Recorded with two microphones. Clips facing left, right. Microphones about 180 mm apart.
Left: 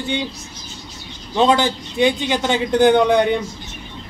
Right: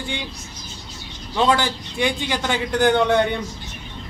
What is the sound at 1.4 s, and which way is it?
A man's voice, 20° left (ahead or behind).